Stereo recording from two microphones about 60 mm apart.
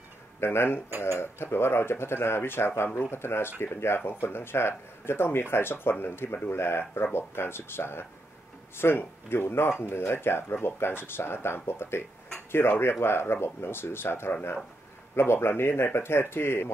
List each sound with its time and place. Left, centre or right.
0.4 s speech: left